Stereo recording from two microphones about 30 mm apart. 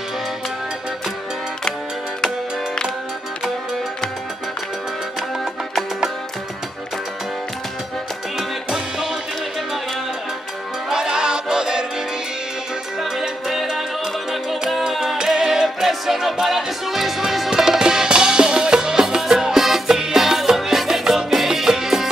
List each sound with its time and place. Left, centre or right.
2.2 s music: left
8.6 s music: centre
10.9 s music: right
13.5 s music: centre
17.5 s music: right